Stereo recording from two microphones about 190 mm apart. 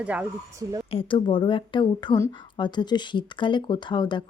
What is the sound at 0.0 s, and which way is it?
Speech, 5° right (ahead or behind).